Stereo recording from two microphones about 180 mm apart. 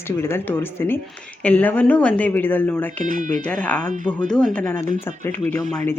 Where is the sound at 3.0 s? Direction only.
50° right (ahead or behind).